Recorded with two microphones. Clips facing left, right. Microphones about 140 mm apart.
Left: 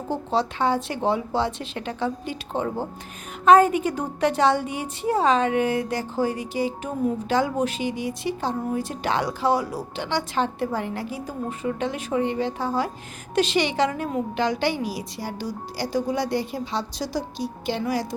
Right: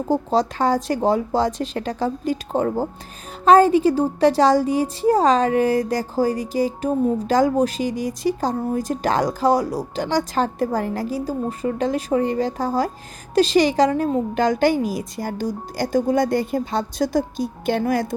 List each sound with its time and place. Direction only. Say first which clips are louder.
0.1 s a woman's voice: right 5 dB; 40° right (ahead or behind)